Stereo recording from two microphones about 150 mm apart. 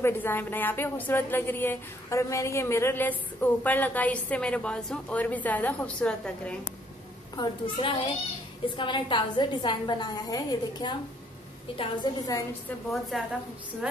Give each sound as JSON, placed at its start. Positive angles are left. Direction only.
{"t": 0.0, "sound": "a woman's voice", "side_deg": 15}
{"t": 7.3, "sound": "a woman's voice", "side_deg": 35}
{"t": 13.1, "sound": "a woman's voice", "side_deg": 0}